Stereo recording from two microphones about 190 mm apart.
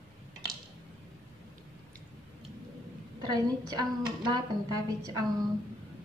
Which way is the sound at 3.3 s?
20° right (ahead or behind).